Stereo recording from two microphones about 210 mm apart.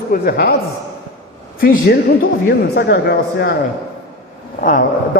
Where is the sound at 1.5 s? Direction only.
45° left (ahead or behind).